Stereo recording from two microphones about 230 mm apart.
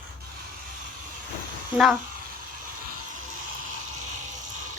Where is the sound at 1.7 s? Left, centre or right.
Centre.